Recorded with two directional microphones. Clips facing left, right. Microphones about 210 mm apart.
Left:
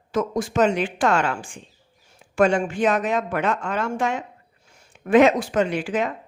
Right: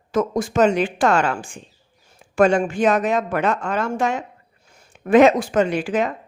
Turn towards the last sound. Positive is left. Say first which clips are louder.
# right 3 dB
turn(degrees=-40)  # may be behind; listen again after turning